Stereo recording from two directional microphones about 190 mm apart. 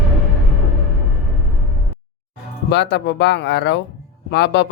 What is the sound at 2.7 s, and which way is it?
Speech, 65° left (ahead or behind).